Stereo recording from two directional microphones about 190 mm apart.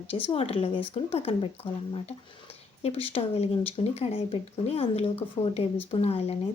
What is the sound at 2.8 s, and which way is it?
Speech, 30° left (ahead or behind).